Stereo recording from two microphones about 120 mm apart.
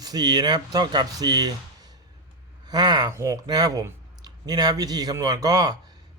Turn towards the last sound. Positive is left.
turn(degrees=-35)  # may be behind; listen again after turning